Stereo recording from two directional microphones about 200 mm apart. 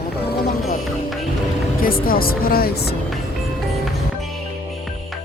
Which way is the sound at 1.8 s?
45° left (ahead or behind).